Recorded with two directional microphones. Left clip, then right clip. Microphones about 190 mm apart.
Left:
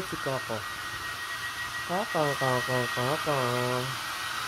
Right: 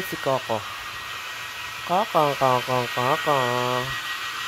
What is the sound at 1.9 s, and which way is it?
Speech, 35° right (ahead or behind).